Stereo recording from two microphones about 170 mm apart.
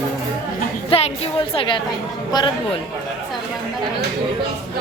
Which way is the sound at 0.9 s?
35° left (ahead or behind).